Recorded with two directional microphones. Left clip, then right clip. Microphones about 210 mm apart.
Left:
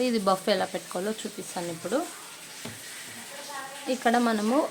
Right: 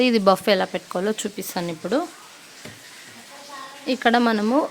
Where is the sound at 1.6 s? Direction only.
55° right (ahead or behind).